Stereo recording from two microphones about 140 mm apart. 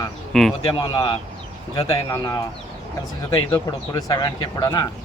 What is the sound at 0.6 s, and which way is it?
Speech, 25° left (ahead or behind).